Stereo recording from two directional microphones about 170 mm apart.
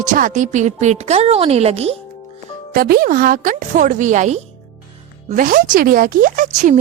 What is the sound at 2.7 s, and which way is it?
A woman's voice, 60° right (ahead or behind).